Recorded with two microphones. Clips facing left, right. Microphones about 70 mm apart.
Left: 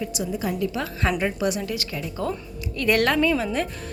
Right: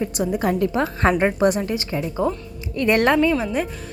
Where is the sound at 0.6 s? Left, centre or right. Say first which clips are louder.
Right 6 dB; right.